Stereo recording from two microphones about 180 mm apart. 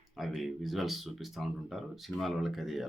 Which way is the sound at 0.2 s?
Centre (ahead or behind).